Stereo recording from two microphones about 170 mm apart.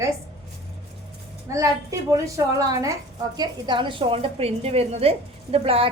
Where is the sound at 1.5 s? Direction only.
20° right (ahead or behind).